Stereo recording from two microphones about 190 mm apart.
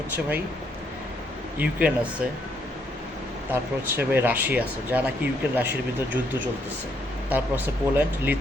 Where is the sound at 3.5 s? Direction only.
10° right (ahead or behind).